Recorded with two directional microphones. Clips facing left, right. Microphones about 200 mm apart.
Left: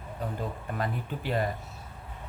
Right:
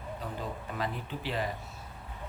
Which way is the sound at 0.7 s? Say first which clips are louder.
Left 3 dB; 50° left (ahead or behind).